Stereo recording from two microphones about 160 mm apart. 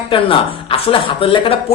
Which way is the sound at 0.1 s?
35° left (ahead or behind).